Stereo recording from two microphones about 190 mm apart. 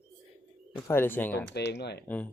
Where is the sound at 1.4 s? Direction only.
60° left (ahead or behind).